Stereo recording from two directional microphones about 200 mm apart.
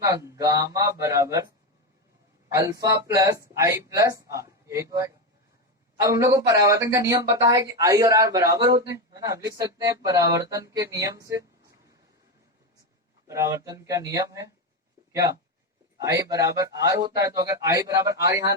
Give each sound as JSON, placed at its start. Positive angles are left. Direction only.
{"t": 0.0, "sound": "speech", "side_deg": -15}
{"t": 2.5, "sound": "speech", "side_deg": -15}
{"t": 13.2, "sound": "speech", "side_deg": -15}
{"t": 16.0, "sound": "speech", "side_deg": -15}